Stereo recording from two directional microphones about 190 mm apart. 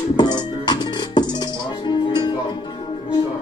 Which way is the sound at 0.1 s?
20° left (ahead or behind).